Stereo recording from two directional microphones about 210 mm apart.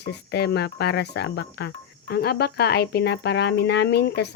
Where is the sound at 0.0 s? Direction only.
50° left (ahead or behind).